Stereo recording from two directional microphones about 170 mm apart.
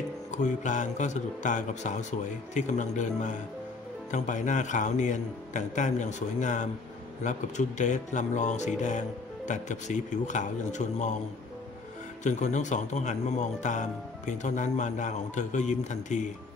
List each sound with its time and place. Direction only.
0.3 s speech: 45° left (ahead or behind)
12.2 s speech: 45° left (ahead or behind)